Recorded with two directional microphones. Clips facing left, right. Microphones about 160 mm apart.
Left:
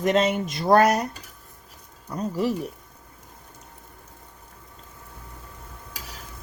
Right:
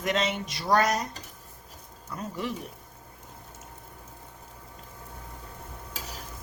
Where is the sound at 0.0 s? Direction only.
40° left (ahead or behind).